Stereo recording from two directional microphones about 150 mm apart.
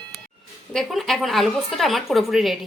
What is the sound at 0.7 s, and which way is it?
A woman's voice, centre (ahead or behind).